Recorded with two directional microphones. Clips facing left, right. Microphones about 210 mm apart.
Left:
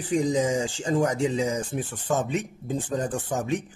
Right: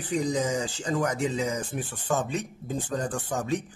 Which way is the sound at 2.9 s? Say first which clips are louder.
Left 2 dB; 20° left (ahead or behind).